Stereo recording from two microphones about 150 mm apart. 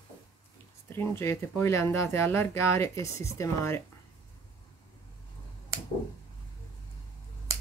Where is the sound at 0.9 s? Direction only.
15° left (ahead or behind).